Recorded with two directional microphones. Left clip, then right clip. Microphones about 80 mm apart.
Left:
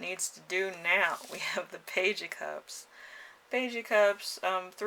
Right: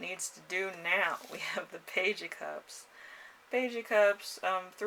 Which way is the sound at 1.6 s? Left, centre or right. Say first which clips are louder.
Left 2 dB; left.